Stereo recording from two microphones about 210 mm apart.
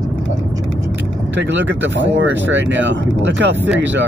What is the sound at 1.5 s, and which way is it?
Speech, 60° right (ahead or behind).